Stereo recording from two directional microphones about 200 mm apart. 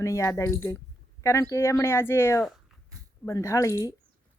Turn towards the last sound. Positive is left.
turn(degrees=15)  # may be behind; listen again after turning